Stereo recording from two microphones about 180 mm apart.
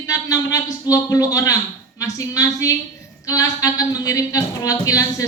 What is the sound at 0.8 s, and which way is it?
Speech, 20° left (ahead or behind).